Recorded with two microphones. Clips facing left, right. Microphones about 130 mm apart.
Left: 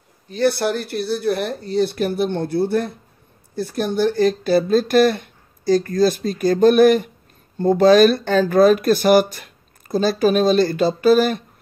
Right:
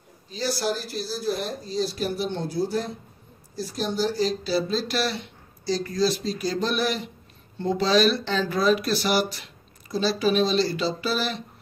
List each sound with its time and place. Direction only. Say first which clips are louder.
0.3 s speech: left 8 dB; 60° left (ahead or behind)